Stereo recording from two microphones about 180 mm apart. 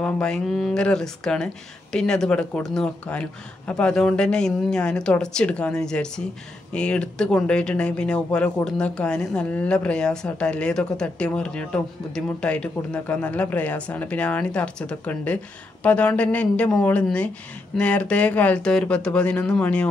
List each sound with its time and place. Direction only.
0.0 s speech: 5° left (ahead or behind)